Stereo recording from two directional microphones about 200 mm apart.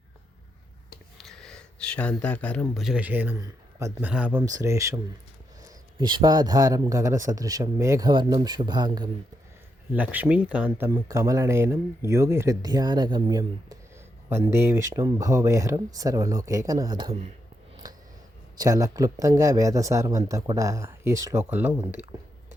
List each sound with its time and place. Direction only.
1.2 s a man's voice: centre (ahead or behind); by 9.0 s 20° right (ahead or behind)
9.9 s speech: 10° right (ahead or behind)
18.5 s speech: 15° right (ahead or behind)